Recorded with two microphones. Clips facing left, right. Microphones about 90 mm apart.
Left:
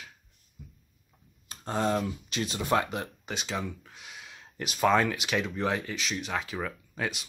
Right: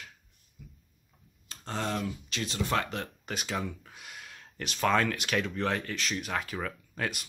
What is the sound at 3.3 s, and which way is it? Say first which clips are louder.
Speech: even; centre (ahead or behind).